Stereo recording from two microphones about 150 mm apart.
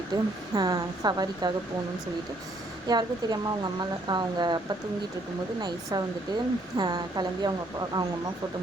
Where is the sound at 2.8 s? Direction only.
25° right (ahead or behind).